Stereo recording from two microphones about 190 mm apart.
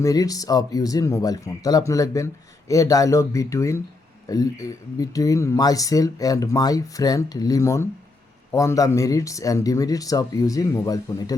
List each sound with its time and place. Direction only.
0.0 s speech: 20° left (ahead or behind)